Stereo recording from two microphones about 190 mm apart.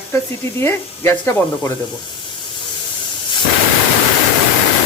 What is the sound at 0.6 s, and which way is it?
Speech, 10° left (ahead or behind).